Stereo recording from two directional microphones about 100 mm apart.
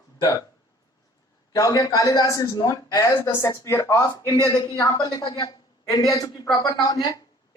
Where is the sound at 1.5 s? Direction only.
35° left (ahead or behind).